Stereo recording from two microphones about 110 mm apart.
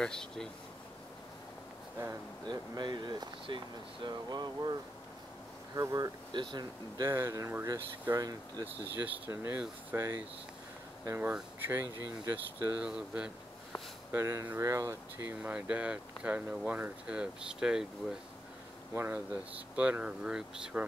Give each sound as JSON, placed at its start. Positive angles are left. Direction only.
{"t": 0.0, "sound": "speech", "side_deg": 5}
{"t": 2.4, "sound": "speech", "side_deg": -40}
{"t": 5.8, "sound": "speech", "side_deg": -30}
{"t": 6.3, "sound": "speech", "side_deg": -45}
{"t": 8.8, "sound": "speech", "side_deg": -15}
{"t": 11.6, "sound": "speech", "side_deg": -20}
{"t": 12.8, "sound": "speech", "side_deg": -10}
{"t": 14.1, "sound": "speech", "side_deg": -20}
{"t": 18.9, "sound": "speech", "side_deg": -20}